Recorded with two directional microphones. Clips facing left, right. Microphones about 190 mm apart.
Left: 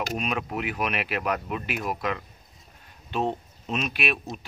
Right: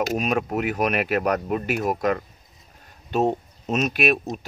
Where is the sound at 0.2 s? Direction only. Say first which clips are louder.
Right 6 dB; 45° right (ahead or behind).